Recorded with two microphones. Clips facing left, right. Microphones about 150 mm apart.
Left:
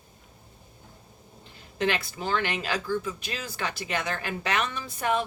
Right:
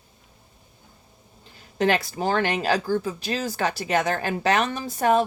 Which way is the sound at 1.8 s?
40° right (ahead or behind).